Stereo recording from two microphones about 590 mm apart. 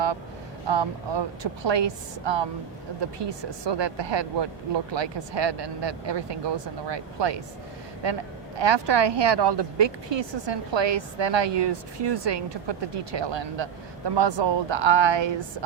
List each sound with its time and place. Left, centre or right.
0.7 s speech: right
8.5 s speech: right